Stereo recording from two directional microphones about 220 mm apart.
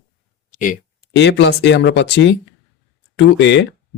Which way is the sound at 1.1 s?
55° left (ahead or behind).